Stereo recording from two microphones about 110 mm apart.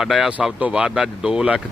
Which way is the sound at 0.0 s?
5° right (ahead or behind).